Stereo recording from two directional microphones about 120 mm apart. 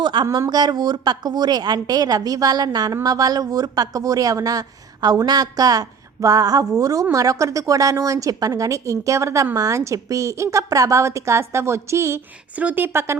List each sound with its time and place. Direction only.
0.0 s a woman's voice: 40° right (ahead or behind); by 13.1 s 20° right (ahead or behind)